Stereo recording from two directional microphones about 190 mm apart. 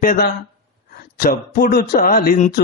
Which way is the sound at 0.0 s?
45° left (ahead or behind).